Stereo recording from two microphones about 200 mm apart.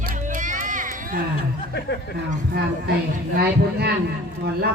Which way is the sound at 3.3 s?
55° right (ahead or behind).